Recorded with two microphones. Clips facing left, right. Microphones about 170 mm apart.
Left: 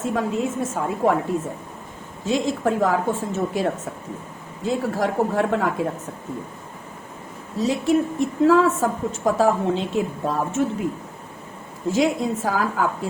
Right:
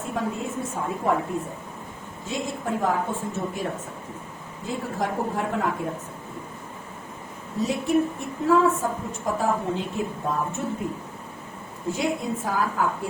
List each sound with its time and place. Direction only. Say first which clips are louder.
0.0 s a woman's voice: left 5 dB; 90° left
2.2 s a woman's voice: left 8 dB; 90° left
7.6 s a woman's voice: left 3 dB; 90° left
11.9 s a woman's voice: left 6 dB; 90° left